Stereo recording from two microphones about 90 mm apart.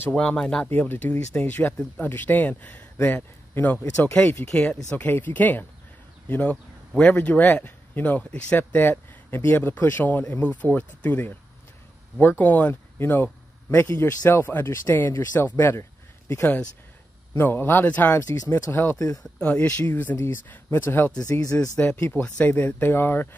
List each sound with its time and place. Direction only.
0.2 s speech: 10° left (ahead or behind)
0.7 s speech: 20° left (ahead or behind)
19.4 s speech: 15° left (ahead or behind)
21.1 s speech: 45° left (ahead or behind)
21.8 s speech: 25° left (ahead or behind)